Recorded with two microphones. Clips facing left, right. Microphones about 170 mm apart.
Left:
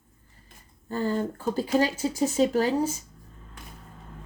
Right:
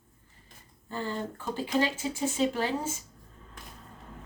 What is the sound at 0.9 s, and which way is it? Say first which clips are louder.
Speech: left 7 dB; 45° left (ahead or behind).